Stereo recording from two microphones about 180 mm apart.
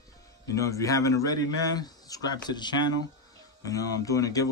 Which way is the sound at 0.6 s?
15° left (ahead or behind).